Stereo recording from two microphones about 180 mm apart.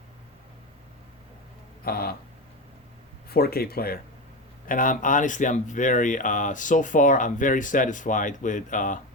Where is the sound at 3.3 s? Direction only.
60° left (ahead or behind).